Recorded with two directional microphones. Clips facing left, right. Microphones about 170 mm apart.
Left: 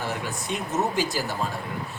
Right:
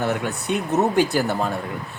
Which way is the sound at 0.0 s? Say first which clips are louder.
Right 7 dB; 60° right (ahead or behind).